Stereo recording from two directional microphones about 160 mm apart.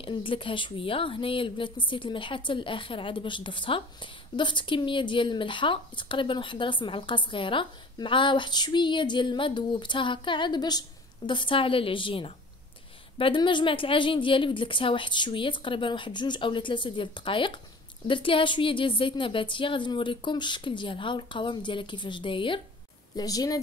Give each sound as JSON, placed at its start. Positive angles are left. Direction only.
{"t": 0.0, "sound": "a woman's voice", "side_deg": 35}